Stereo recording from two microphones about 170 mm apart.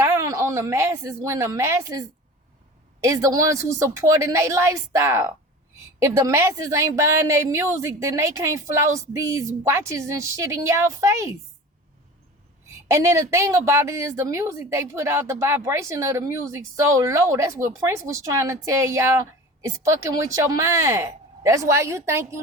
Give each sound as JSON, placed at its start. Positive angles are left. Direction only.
{"t": 0.0, "sound": "a woman's voice", "side_deg": -15}
{"t": 12.9, "sound": "a woman's voice", "side_deg": -15}